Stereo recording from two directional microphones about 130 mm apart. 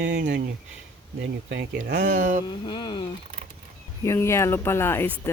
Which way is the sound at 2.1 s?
70° right (ahead or behind).